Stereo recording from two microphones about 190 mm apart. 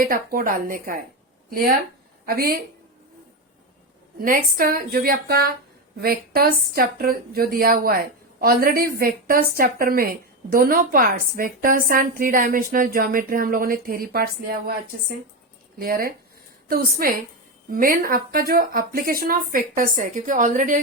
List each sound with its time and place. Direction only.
0.0 s a woman's voice: 50° right (ahead or behind)
4.2 s a woman's voice: 50° right (ahead or behind)
15.8 s a woman's voice: 50° right (ahead or behind)